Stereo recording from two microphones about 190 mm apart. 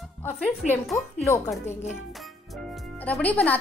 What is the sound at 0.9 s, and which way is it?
Speech, 15° left (ahead or behind).